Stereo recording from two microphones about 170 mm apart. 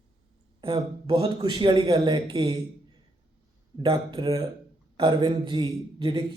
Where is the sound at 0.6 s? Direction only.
30° right (ahead or behind).